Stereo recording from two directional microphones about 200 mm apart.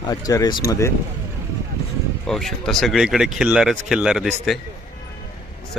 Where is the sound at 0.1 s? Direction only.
20° left (ahead or behind).